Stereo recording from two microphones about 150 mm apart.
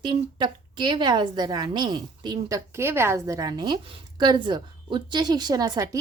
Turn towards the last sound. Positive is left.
turn(degrees=-25)  # may be behind; listen again after turning